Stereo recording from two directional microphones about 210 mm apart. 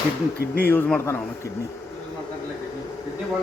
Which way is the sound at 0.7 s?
10° left (ahead or behind).